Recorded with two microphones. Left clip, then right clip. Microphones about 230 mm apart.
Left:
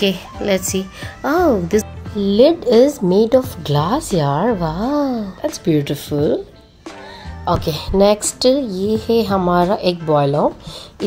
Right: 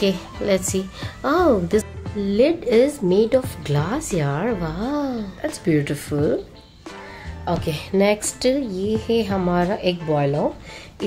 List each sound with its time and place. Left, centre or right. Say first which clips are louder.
0.0 s speech: left 3 dB; centre
7.4 s speech: left 6 dB; centre